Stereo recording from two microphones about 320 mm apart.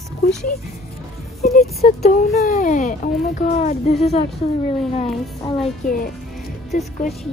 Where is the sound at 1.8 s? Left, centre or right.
Left.